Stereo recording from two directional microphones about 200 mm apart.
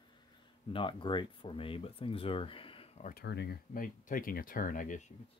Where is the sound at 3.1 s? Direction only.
55° left (ahead or behind).